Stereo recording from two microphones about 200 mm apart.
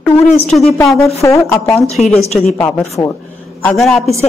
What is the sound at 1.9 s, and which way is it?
Speech, 35° left (ahead or behind).